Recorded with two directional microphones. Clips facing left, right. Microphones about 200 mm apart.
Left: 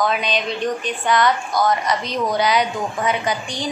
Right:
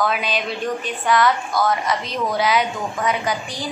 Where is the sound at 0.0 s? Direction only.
5° right (ahead or behind).